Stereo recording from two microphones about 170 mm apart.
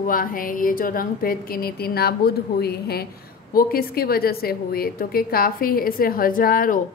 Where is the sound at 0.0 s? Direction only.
55° left (ahead or behind).